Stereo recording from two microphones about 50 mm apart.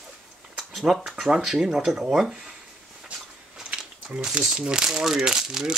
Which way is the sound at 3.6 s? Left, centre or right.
Centre.